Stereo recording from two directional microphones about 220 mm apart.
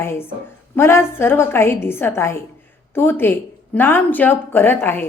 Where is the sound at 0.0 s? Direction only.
10° left (ahead or behind).